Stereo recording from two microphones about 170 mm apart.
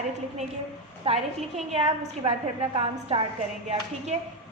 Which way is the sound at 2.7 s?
35° right (ahead or behind).